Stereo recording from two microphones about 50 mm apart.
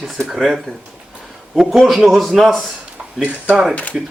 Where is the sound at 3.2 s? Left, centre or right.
Right.